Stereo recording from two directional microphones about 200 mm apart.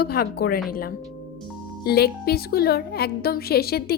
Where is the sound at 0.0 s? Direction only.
50° left (ahead or behind).